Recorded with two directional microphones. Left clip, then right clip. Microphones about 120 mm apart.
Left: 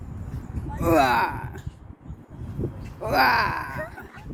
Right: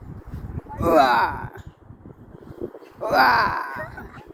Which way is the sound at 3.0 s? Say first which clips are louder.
Right 3 dB; 25° left (ahead or behind).